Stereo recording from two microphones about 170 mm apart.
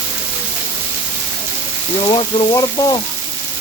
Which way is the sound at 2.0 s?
30° left (ahead or behind).